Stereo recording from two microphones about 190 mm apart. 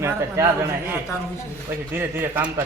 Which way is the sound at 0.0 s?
15° right (ahead or behind).